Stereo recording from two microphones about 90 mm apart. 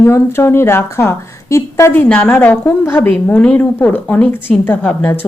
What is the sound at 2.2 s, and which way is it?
A woman's voice, 20° left (ahead or behind).